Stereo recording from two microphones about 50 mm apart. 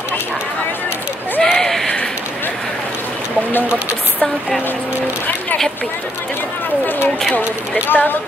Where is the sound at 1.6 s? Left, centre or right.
Centre.